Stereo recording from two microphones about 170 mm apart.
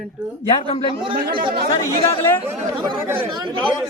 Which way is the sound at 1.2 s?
60° right (ahead or behind).